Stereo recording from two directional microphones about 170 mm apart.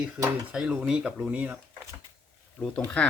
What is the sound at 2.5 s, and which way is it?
Speech, 10° left (ahead or behind).